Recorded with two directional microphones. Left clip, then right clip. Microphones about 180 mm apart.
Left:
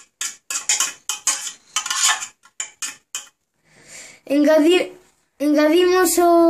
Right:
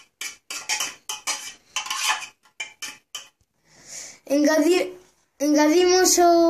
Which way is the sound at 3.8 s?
40° left (ahead or behind).